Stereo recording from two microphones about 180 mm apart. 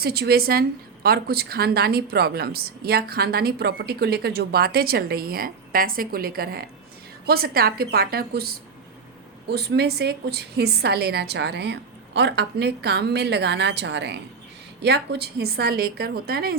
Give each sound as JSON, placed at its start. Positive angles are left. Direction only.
{"t": 0.0, "sound": "speech", "side_deg": -60}